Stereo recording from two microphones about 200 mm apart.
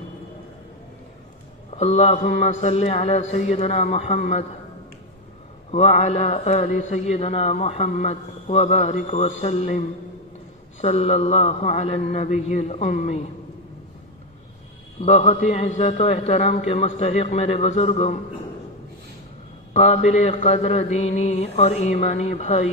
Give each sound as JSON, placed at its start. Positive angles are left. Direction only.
{"t": 1.7, "sound": "a man's voice", "side_deg": 30}
{"t": 5.7, "sound": "a man's voice", "side_deg": 35}
{"t": 15.0, "sound": "a man's voice", "side_deg": 35}
{"t": 19.7, "sound": "a man's voice", "side_deg": 35}